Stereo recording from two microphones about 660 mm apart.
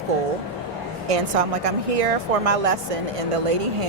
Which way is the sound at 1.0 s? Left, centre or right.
Right.